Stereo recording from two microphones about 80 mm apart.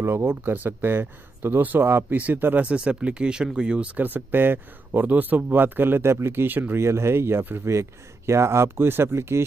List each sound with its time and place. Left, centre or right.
0.0 s speech: right
6.8 s speech: right